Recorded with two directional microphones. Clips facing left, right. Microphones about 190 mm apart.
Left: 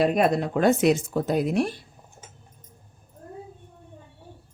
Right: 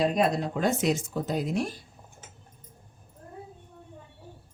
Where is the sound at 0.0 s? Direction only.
60° left (ahead or behind).